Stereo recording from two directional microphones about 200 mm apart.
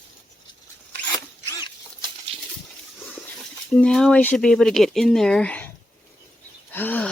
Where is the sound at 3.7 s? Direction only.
5° left (ahead or behind).